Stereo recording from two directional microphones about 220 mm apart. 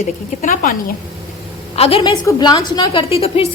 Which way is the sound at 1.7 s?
25° left (ahead or behind).